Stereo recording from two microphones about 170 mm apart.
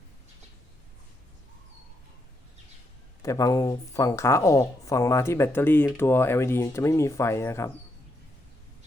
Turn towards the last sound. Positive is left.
turn(degrees=15)  # may be behind; listen again after turning